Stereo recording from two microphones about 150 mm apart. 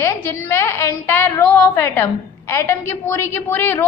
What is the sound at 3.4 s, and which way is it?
Speech, 15° left (ahead or behind).